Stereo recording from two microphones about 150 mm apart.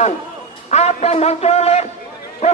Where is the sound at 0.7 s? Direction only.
50° left (ahead or behind).